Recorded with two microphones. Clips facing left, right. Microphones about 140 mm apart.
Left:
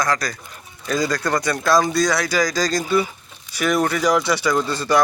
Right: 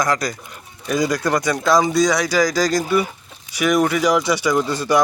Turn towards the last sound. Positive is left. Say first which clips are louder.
# right 1 dB
turn(degrees=-15)  # may be behind; listen again after turning